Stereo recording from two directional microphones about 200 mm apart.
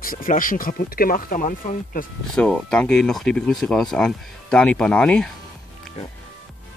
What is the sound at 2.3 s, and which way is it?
Speech, 5° left (ahead or behind).